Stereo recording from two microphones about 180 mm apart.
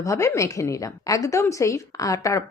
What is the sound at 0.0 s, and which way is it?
A woman's voice, 15° left (ahead or behind).